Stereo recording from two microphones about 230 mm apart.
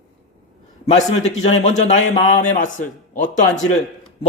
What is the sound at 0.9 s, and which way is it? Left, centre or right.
A man's voice, left.